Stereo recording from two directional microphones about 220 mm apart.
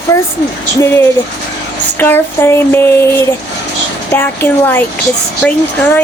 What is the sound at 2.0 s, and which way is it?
Speech, 10° left (ahead or behind).